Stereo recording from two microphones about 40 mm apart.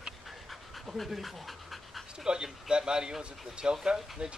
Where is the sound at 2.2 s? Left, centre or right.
Centre.